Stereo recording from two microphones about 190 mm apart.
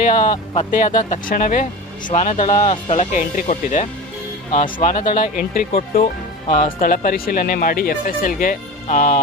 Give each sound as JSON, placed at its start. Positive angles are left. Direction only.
{"t": 0.2, "sound": "speech", "side_deg": 25}
{"t": 0.7, "sound": "speech", "side_deg": 45}
{"t": 3.0, "sound": "speech", "side_deg": 40}